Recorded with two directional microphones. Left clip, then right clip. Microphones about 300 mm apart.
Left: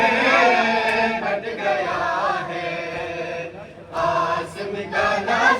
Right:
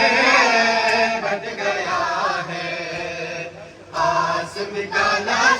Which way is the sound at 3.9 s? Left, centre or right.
Right.